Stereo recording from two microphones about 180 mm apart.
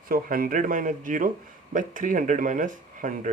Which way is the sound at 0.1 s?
50° right (ahead or behind).